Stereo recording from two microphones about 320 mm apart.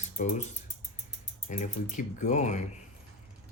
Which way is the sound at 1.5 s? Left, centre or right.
Left.